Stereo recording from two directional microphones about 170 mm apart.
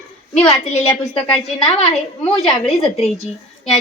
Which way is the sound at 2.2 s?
Centre (ahead or behind).